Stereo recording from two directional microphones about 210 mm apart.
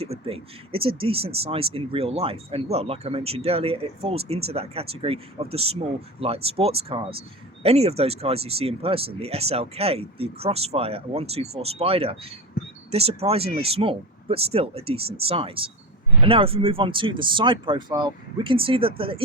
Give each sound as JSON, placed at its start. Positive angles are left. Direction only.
{"t": 0.0, "sound": "speech", "side_deg": -30}